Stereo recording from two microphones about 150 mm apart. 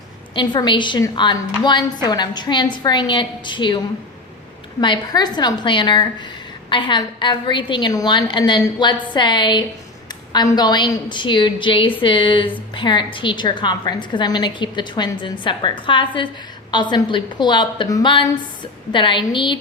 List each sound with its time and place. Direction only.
0.3 s a woman's voice: 30° left (ahead or behind)
4.8 s a woman's voice: 30° left (ahead or behind)